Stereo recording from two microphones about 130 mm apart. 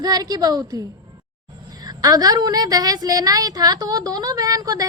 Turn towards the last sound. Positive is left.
turn(degrees=-30)  # may be behind; listen again after turning